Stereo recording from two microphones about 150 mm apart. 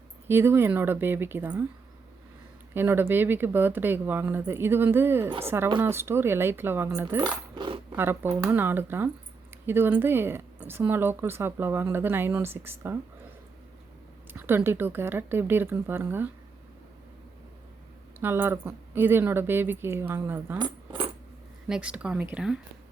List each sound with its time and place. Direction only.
0.3 s a woman's voice: 15° right (ahead or behind)
2.7 s a woman's voice: 15° right (ahead or behind)
7.5 s coin: 30° right (ahead or behind)
7.9 s a woman's voice: 15° right (ahead or behind)
14.3 s a woman's voice: 15° right (ahead or behind)
18.2 s a woman's voice: 15° right (ahead or behind)
20.6 s coin: 30° right (ahead or behind)
21.7 s a woman's voice: 5° right (ahead or behind)